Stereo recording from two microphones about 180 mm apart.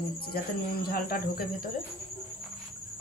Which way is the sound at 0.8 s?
55° left (ahead or behind).